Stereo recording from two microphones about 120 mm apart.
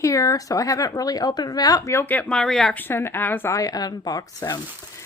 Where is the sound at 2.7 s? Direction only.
20° left (ahead or behind).